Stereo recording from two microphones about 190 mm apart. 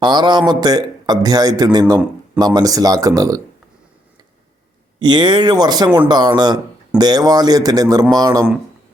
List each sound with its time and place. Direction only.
0.0 s a man's voice: 25° right (ahead or behind)
4.9 s a man's voice: 25° right (ahead or behind)